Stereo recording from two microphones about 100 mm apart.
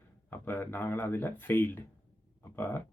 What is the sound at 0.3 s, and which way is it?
Speech, 20° left (ahead or behind).